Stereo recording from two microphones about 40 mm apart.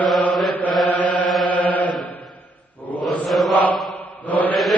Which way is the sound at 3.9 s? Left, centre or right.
Left.